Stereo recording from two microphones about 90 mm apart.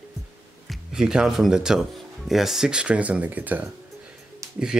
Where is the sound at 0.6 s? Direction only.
10° right (ahead or behind).